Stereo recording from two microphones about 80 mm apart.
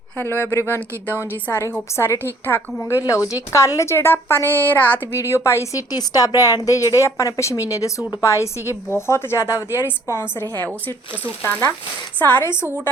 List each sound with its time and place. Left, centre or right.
0.2 s a woman's voice: left
3.0 s a woman's voice: left
5.2 s a woman's voice: left
5.9 s a woman's voice: left
12.2 s a woman's voice: left